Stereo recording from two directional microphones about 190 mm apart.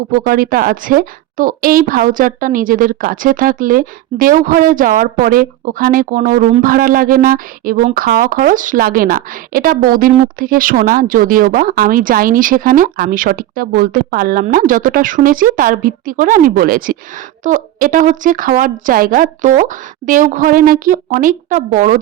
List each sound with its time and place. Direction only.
0.1 s a woman's voice: 50° right (ahead or behind)